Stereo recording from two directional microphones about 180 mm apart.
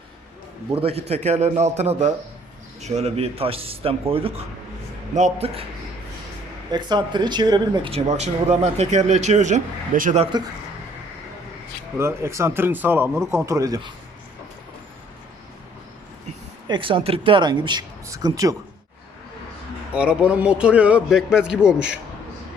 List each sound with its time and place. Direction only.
0.8 s speech: 35° right (ahead or behind)
6.7 s speech: 25° right (ahead or behind); by 10.2 s 45° right (ahead or behind)
11.9 s speech: 15° right (ahead or behind)
16.6 s speech: 25° right (ahead or behind)
19.9 s a man's voice: 5° right (ahead or behind)